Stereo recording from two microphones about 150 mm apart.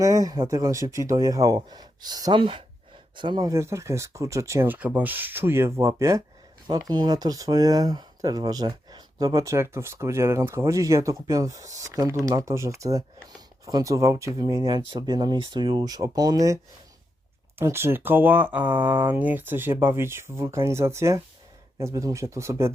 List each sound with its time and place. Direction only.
0.0 s speech: 20° right (ahead or behind)
17.6 s speech: 15° right (ahead or behind)